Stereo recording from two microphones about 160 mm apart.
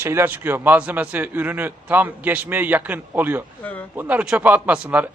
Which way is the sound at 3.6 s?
10° left (ahead or behind).